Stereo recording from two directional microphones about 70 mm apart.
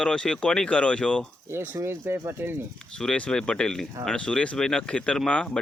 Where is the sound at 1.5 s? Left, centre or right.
Right.